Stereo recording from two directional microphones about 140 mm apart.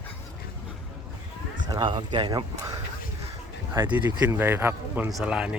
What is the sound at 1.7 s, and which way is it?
Speech, 30° right (ahead or behind).